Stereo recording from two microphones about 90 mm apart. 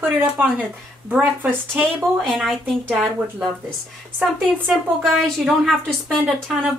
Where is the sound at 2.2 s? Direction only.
Centre (ahead or behind).